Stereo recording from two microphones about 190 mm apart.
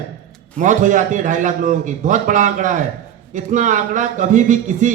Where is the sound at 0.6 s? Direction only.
40° right (ahead or behind).